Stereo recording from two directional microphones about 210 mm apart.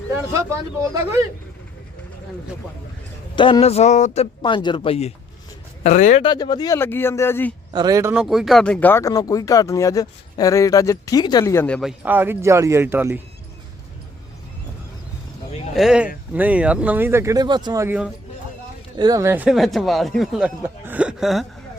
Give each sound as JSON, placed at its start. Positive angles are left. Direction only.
{"t": 0.8, "sound": "speech", "side_deg": -15}
{"t": 3.3, "sound": "a man's voice", "side_deg": 25}
{"t": 6.2, "sound": "speech", "side_deg": 20}
{"t": 7.7, "sound": "speech", "side_deg": -20}
{"t": 8.2, "sound": "speech", "side_deg": 0}
{"t": 15.7, "sound": "speech", "side_deg": 0}